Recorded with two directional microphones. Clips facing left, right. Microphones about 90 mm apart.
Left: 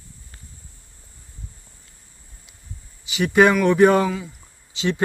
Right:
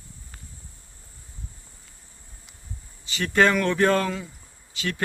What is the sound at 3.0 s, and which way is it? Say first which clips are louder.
Speech: left 5 dB; 15° left (ahead or behind).